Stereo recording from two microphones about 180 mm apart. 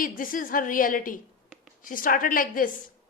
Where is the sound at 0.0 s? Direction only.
50° left (ahead or behind).